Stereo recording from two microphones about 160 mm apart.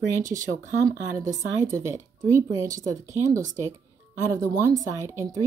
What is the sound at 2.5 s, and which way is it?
Speech, 20° right (ahead or behind).